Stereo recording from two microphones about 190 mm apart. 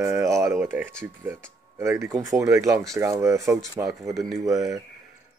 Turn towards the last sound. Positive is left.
turn(degrees=-15)  # may be behind; listen again after turning